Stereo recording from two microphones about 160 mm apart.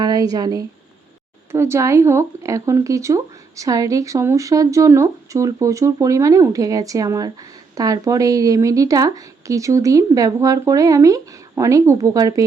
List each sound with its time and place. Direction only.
0.0 s speech: 25° right (ahead or behind)